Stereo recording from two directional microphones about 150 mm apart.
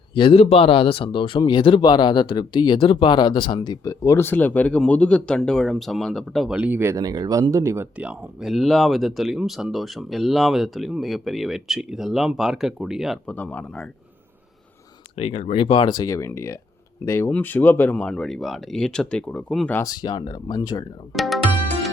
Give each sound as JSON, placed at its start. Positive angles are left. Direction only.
{"t": 0.1, "sound": "speech", "side_deg": 35}
{"t": 6.6, "sound": "speech", "side_deg": -15}
{"t": 7.9, "sound": "speech", "side_deg": -10}
{"t": 13.3, "sound": "speech", "side_deg": 10}
{"t": 15.1, "sound": "speech", "side_deg": 45}
{"t": 19.7, "sound": "speech", "side_deg": 25}
{"t": 21.1, "sound": "speech", "side_deg": 0}